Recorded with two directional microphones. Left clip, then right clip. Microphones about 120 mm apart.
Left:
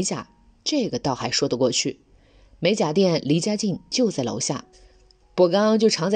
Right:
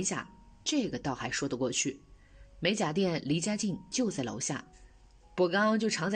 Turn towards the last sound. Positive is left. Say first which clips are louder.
# left 10 dB
turn(degrees=30)  # may be behind; listen again after turning